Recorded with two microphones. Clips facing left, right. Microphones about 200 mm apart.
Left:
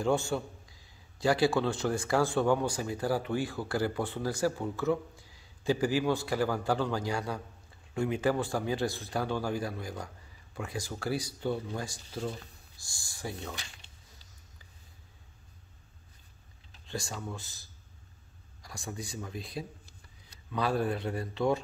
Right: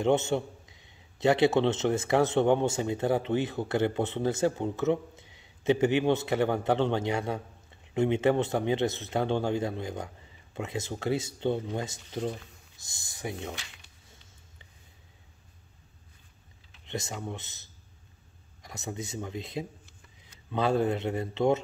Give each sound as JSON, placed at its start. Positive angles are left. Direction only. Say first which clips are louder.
{"t": 0.0, "sound": "a man's voice", "louder": "right 4 dB", "side_deg": -20}
{"t": 16.8, "sound": "a man's voice", "louder": "right 3 dB", "side_deg": -20}